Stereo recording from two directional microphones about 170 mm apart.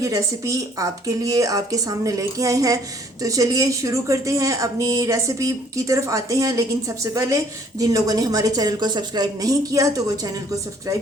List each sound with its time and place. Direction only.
0.0 s speech: 20° right (ahead or behind)